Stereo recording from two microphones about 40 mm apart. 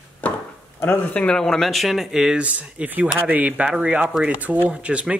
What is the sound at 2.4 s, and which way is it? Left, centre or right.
Speech, right.